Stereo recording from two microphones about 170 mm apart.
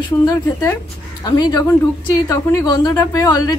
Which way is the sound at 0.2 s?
20° left (ahead or behind).